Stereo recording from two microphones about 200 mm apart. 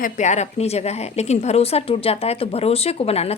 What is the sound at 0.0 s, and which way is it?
A woman's voice, 35° left (ahead or behind).